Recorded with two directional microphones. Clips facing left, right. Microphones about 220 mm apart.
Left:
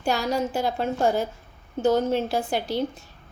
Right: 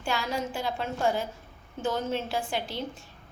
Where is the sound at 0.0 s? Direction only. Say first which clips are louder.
Left 6 dB; 40° left (ahead or behind).